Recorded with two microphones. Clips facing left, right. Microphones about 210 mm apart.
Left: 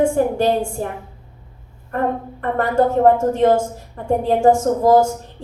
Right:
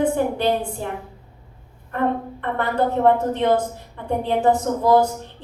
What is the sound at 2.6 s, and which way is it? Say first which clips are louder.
A woman's voice: left 4 dB; 45° left (ahead or behind).